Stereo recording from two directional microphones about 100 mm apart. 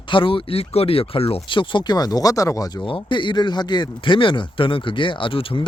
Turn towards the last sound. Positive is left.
turn(degrees=60)  # may be behind; listen again after turning